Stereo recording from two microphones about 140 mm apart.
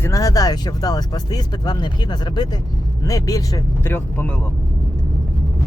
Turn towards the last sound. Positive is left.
turn(degrees=15)  # may be behind; listen again after turning